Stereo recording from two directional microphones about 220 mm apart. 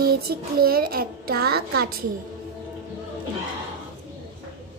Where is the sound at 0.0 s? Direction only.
45° right (ahead or behind).